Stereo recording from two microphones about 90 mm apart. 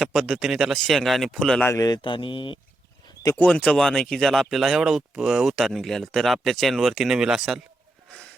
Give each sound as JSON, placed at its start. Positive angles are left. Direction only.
{"t": 0.0, "sound": "speech", "side_deg": 0}
{"t": 1.7, "sound": "mantra", "side_deg": 45}
{"t": 2.0, "sound": "mantra", "side_deg": 65}
{"t": 3.3, "sound": "speech", "side_deg": 15}
{"t": 8.1, "sound": "wheeze", "side_deg": 15}